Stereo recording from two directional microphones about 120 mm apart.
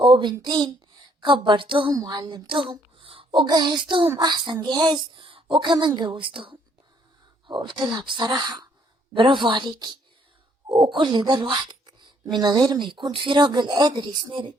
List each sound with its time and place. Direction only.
0.0 s a woman's voice: 45° right (ahead or behind)
1.9 s speech: 30° right (ahead or behind)